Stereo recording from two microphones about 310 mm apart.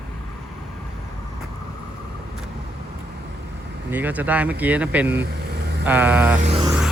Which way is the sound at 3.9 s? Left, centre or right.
Centre.